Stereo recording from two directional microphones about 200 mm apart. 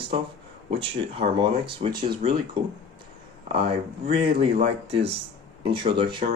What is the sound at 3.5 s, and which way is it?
Speech, 25° right (ahead or behind).